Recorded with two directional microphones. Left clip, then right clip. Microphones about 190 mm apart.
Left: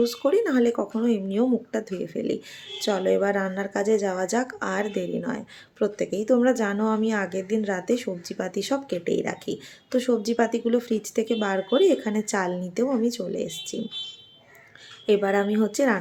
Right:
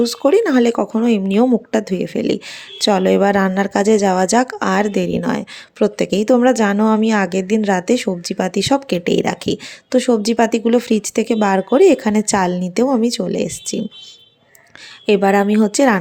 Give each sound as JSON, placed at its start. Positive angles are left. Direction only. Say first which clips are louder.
{"t": 0.0, "sound": "speech", "louder": "right 8 dB", "side_deg": -40}
{"t": 15.0, "sound": "speech", "louder": "right 8 dB", "side_deg": -40}